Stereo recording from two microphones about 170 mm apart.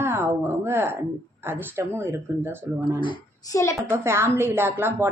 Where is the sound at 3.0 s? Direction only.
30° left (ahead or behind).